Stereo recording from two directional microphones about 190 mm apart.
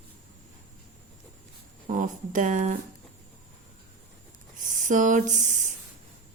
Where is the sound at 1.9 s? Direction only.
45° right (ahead or behind).